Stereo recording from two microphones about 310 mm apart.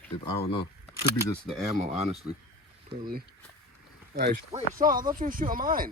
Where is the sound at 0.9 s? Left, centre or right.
Centre.